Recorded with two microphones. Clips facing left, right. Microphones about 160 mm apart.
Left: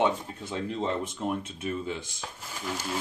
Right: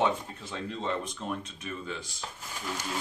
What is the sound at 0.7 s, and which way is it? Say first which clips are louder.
Speech: left 2 dB; 25° left (ahead or behind).